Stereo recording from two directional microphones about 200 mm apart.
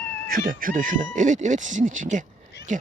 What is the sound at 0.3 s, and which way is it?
Speech, 45° right (ahead or behind).